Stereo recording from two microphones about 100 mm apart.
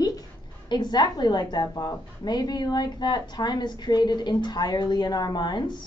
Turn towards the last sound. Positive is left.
turn(degrees=45)  # may be behind; listen again after turning